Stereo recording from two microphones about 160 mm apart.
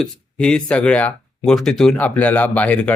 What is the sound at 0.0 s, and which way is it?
Speech, 5° left (ahead or behind).